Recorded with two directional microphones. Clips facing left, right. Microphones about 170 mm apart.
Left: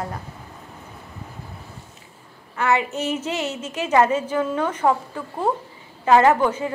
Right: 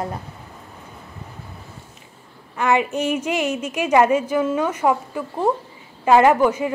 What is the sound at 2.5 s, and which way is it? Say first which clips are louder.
A woman's voice: right 2 dB; 15° right (ahead or behind).